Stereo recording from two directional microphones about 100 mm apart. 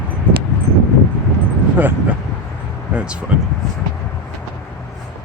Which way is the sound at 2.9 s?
10° right (ahead or behind).